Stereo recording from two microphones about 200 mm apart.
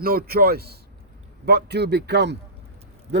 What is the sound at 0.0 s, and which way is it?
A man's voice, 50° right (ahead or behind).